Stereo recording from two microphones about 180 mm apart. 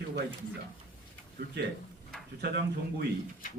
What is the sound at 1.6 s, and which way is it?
Speech, 75° right (ahead or behind).